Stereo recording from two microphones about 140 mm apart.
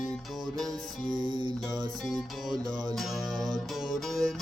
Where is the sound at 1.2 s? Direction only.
35° right (ahead or behind).